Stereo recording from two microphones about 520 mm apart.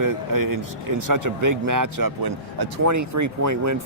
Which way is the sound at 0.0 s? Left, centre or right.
Right.